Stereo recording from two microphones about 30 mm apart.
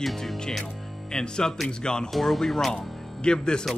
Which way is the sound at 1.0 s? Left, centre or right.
Left.